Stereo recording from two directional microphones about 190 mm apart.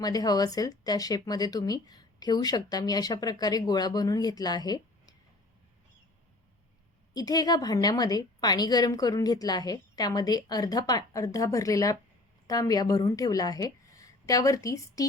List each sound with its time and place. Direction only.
0.0 s speech: 20° left (ahead or behind)
7.1 s a woman's voice: 20° left (ahead or behind)